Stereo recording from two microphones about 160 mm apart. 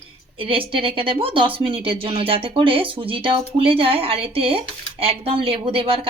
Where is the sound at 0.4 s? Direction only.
35° right (ahead or behind).